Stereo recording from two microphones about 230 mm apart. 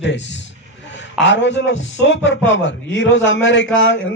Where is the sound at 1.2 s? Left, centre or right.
Left.